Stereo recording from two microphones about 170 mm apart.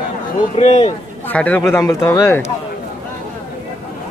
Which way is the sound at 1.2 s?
10° left (ahead or behind).